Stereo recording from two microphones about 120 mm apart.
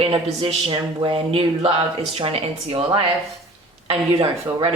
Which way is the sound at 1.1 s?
55° right (ahead or behind).